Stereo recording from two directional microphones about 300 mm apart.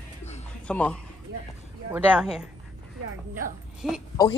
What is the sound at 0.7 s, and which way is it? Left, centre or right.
Speech, centre.